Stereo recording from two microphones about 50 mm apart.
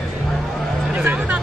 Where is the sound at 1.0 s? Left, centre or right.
Right.